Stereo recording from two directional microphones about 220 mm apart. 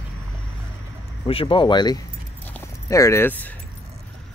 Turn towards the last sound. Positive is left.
turn(degrees=10)  # may be behind; listen again after turning